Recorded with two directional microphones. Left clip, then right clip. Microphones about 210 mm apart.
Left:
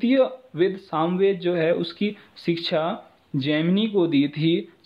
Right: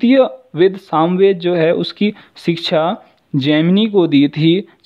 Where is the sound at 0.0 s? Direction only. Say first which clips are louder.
Right 8 dB; 45° right (ahead or behind).